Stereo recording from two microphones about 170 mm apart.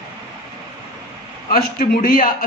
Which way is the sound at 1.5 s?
60° left (ahead or behind).